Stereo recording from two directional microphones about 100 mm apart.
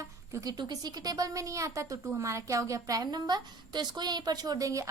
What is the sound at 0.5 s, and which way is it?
A woman's voice, 45° right (ahead or behind).